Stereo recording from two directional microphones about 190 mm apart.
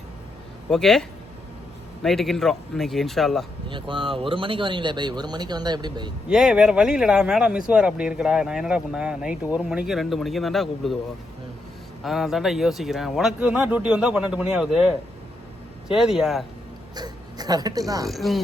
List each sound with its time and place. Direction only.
0.7 s speech: centre (ahead or behind)
3.7 s speech: 25° right (ahead or behind)
6.2 s speech: 5° right (ahead or behind)
12.0 s speech: centre (ahead or behind)
16.9 s speech: 20° right (ahead or behind)
18.1 s speech: centre (ahead or behind)